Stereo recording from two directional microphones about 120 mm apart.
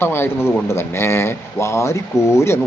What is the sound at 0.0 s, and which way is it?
Speech, 20° left (ahead or behind).